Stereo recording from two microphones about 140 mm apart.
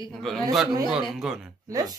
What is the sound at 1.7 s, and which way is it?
Speech, 30° right (ahead or behind).